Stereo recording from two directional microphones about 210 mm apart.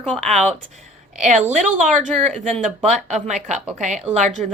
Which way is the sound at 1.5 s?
35° right (ahead or behind).